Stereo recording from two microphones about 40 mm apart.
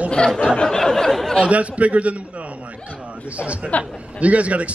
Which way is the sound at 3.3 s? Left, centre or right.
Right.